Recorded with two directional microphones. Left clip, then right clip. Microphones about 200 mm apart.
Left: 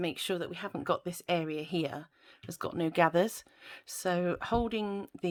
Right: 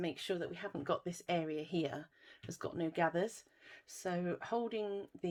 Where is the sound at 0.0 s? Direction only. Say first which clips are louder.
Left 5 dB; 35° left (ahead or behind).